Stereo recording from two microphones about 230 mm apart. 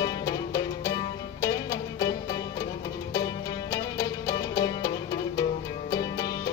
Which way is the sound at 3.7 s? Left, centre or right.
Centre.